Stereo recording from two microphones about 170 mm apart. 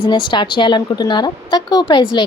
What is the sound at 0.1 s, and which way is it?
Speech, 25° left (ahead or behind).